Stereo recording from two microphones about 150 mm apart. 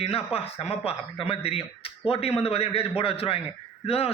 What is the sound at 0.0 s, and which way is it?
Speech, 40° left (ahead or behind).